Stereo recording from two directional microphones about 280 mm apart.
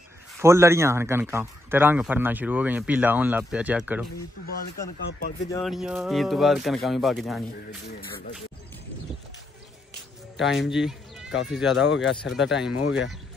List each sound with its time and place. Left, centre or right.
0.4 s a man's voice: centre
4.5 s speech: left
5.6 s speech: centre
10.3 s speech: centre
11.8 s speech: left